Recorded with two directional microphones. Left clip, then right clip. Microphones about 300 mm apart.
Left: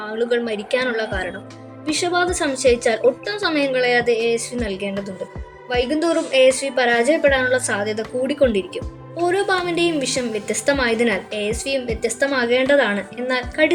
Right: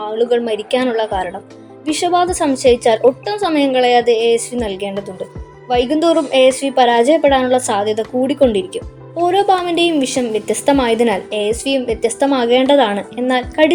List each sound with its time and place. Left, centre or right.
0.1 s a woman's voice: centre